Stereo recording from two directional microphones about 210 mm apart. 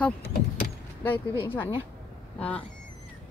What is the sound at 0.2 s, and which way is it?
Vehicle, 50° left (ahead or behind).